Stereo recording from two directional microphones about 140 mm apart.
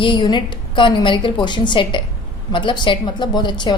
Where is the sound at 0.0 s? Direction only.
35° left (ahead or behind).